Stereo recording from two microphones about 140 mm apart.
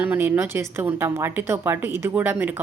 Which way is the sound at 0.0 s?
15° right (ahead or behind).